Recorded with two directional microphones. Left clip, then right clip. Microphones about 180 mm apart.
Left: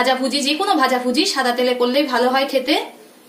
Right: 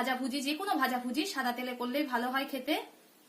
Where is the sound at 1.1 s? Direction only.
45° right (ahead or behind).